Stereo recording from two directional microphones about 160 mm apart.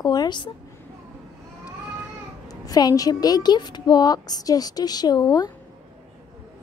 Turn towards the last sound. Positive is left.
turn(degrees=25)  # may be behind; listen again after turning